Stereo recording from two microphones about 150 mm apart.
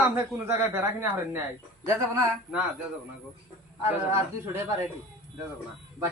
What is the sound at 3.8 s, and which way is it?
Speech, 15° right (ahead or behind).